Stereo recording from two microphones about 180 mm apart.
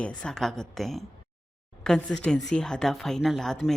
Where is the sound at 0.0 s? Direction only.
5° left (ahead or behind).